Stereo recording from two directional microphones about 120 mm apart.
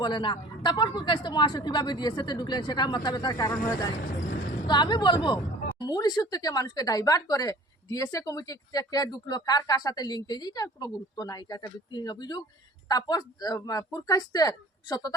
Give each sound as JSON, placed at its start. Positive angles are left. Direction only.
{"t": 0.0, "sound": "a woman's voice", "side_deg": 40}